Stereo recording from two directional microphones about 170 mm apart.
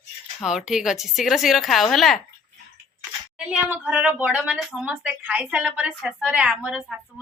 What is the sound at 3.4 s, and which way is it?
A woman's voice, 10° right (ahead or behind).